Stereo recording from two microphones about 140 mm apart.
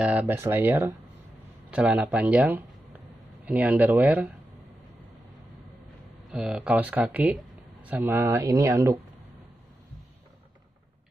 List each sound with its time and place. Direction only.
0.0 s speech: 10° right (ahead or behind)
6.3 s speech: 10° right (ahead or behind)